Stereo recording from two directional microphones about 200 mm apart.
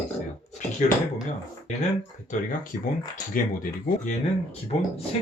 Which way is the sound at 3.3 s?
45° left (ahead or behind).